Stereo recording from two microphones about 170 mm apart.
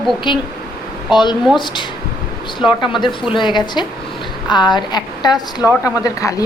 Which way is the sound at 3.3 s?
25° left (ahead or behind).